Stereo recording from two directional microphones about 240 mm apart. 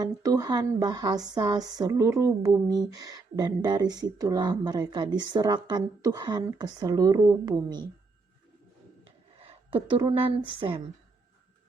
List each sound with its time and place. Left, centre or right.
0.0 s speech: centre
9.4 s speech: right